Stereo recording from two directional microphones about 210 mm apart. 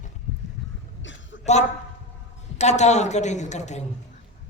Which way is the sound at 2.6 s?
35° left (ahead or behind).